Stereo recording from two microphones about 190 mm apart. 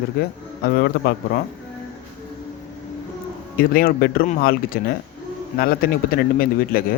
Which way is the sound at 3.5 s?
50° left (ahead or behind).